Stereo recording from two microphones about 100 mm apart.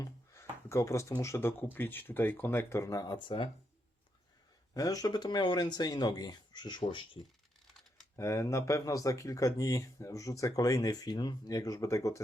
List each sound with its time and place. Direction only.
0.0 s speech: 30° left (ahead or behind)
3.1 s speech: 55° left (ahead or behind)
4.7 s speech: 35° left (ahead or behind); by 7.2 s 55° left (ahead or behind)
8.1 s speech: 30° left (ahead or behind)